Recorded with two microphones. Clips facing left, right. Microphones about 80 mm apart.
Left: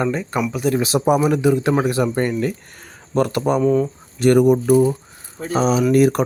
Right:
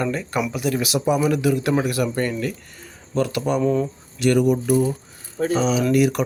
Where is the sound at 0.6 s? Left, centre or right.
Left.